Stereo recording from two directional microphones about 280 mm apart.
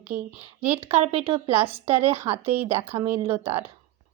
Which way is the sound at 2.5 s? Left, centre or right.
Centre.